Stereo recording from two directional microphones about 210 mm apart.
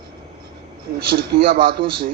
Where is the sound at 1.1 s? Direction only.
45° right (ahead or behind).